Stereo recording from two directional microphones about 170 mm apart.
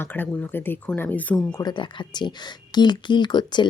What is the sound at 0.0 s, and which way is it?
Speech, 10° left (ahead or behind).